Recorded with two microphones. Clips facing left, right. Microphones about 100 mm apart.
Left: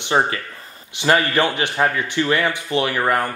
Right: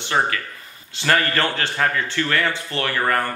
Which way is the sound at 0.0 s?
20° left (ahead or behind).